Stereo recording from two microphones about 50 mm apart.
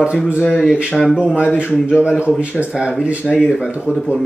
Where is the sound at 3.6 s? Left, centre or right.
Right.